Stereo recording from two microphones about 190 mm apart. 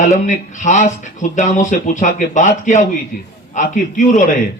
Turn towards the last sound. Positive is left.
turn(degrees=40)  # may be behind; listen again after turning